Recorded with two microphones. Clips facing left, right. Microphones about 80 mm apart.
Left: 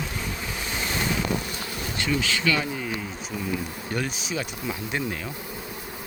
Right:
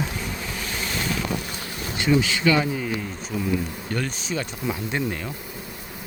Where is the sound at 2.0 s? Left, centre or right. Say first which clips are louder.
Right 5 dB; centre.